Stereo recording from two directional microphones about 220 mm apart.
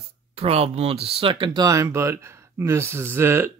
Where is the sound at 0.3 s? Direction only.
25° right (ahead or behind); by 3.5 s 10° right (ahead or behind).